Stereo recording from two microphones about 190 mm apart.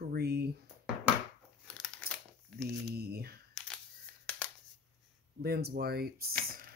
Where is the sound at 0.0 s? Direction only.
55° right (ahead or behind).